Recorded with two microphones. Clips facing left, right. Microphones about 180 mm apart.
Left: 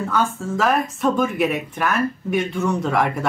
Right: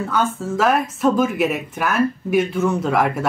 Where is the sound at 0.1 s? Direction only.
Centre (ahead or behind).